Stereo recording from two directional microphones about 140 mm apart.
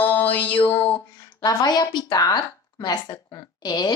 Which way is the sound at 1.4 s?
30° left (ahead or behind).